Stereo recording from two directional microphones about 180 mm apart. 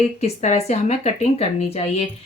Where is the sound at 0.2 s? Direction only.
35° left (ahead or behind).